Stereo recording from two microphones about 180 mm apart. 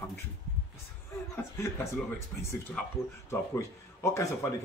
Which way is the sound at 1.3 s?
15° left (ahead or behind).